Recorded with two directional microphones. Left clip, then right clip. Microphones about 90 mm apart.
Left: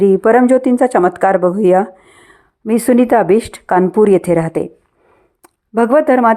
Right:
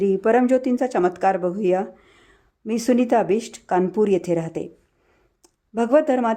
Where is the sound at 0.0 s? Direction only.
35° left (ahead or behind).